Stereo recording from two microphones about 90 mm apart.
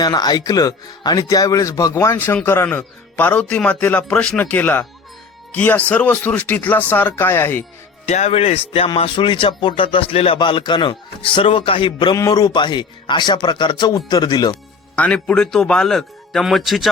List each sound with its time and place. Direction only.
0.0 s speech: 50° left (ahead or behind); by 7.6 s 25° left (ahead or behind)
8.4 s music: 90° left
9.0 s speech: 75° left (ahead or behind)
10.3 s a man's voice: 60° left (ahead or behind)
12.3 s a man's voice: 50° left (ahead or behind)
14.9 s speech: 15° left (ahead or behind)